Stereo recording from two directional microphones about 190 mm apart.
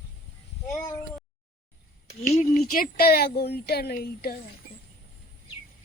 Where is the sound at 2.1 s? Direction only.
35° left (ahead or behind); by 4.4 s 55° left (ahead or behind).